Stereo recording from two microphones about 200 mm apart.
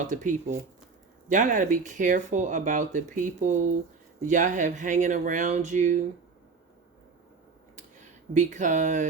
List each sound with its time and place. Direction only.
0.0 s speech: 40° right (ahead or behind)
8.3 s speech: 35° right (ahead or behind)